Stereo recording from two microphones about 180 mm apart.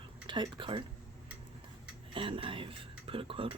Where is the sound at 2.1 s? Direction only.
30° right (ahead or behind).